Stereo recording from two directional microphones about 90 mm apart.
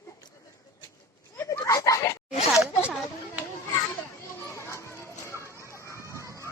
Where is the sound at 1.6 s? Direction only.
40° left (ahead or behind).